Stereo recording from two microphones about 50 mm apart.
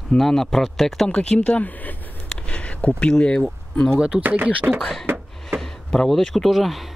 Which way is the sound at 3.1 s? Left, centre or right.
Centre.